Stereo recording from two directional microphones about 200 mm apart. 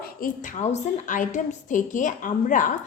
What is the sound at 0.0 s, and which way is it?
A woman's voice, 45° left (ahead or behind).